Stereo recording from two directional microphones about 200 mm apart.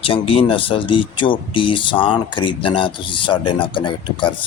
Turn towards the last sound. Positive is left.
turn(degrees=25)  # may be behind; listen again after turning